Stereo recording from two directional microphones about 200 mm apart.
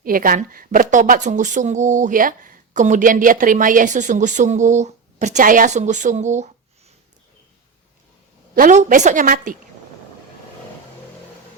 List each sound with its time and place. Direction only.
0.0 s a woman's voice: 45° right (ahead or behind)
8.5 s a woman's voice: 40° right (ahead or behind)